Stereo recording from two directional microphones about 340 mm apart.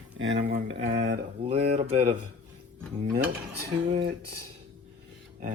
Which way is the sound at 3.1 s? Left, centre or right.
Right.